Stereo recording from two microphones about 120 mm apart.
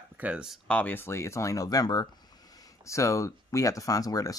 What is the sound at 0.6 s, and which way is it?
Speech, 15° left (ahead or behind).